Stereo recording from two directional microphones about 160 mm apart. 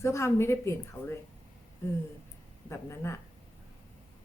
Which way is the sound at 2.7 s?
15° left (ahead or behind).